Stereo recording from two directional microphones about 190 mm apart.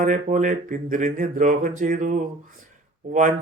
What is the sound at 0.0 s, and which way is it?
Speech, 40° right (ahead or behind).